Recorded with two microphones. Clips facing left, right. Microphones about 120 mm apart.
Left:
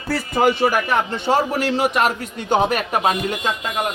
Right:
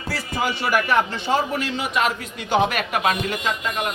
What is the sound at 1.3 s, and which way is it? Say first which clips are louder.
A man's voice: left 4 dB; 65° left (ahead or behind).